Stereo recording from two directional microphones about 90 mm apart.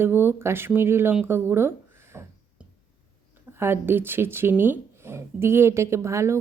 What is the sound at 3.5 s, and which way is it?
Speech, 25° right (ahead or behind).